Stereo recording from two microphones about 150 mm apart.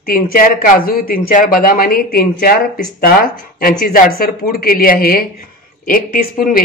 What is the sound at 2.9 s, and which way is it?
Speech, 80° left.